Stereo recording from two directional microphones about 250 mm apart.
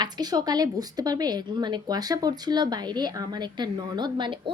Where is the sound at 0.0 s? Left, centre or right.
Centre.